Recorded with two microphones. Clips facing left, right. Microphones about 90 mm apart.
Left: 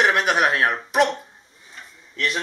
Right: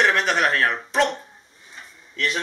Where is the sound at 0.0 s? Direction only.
10° left (ahead or behind).